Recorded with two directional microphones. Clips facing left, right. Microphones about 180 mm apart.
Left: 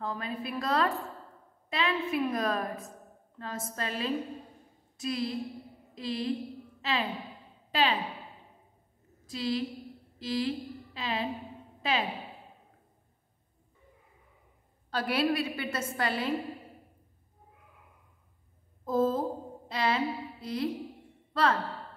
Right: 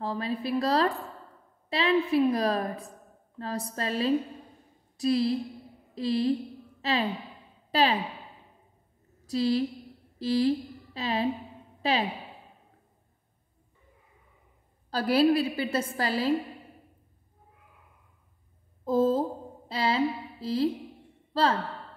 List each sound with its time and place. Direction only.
0.0 s a woman's voice: 30° right (ahead or behind)
9.2 s a woman's voice: 40° right (ahead or behind)
14.9 s a woman's voice: 35° right (ahead or behind)
18.9 s a woman's voice: 30° right (ahead or behind)
21.3 s sigh: 30° right (ahead or behind)